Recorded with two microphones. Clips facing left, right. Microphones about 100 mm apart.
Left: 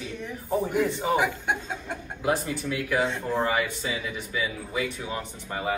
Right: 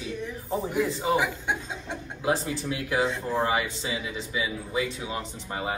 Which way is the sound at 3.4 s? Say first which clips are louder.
Even; 20° right (ahead or behind).